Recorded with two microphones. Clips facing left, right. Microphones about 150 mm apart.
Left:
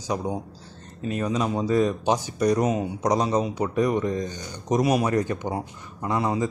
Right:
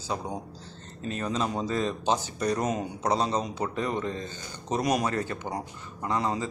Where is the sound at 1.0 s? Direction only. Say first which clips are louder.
Left 4 dB; 10° left (ahead or behind).